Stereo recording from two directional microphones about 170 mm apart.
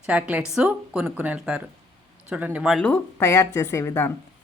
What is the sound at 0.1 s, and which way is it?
Speech, 10° right (ahead or behind).